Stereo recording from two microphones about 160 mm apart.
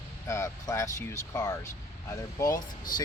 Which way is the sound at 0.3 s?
20° left (ahead or behind).